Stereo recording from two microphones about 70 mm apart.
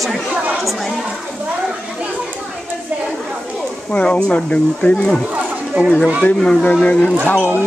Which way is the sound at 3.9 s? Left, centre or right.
Centre.